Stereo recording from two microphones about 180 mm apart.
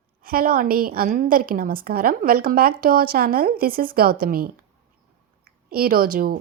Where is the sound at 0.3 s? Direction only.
55° right (ahead or behind).